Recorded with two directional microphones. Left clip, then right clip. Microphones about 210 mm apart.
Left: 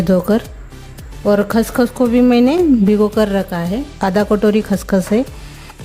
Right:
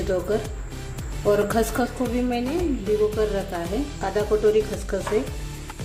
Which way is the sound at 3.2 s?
50° left (ahead or behind).